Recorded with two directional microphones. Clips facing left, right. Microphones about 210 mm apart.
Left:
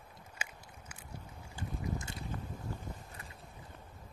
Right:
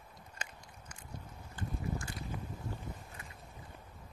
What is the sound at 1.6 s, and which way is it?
Boat, 20° left (ahead or behind).